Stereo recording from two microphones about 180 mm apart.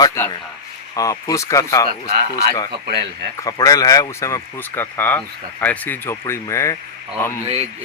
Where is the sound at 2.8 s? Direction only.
65° right (ahead or behind).